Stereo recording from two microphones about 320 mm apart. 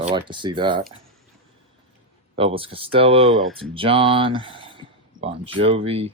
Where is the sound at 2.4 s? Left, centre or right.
Centre.